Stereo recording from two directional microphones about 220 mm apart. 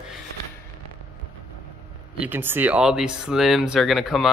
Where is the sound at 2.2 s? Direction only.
10° right (ahead or behind).